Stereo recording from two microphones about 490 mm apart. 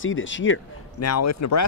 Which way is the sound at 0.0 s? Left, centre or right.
Left.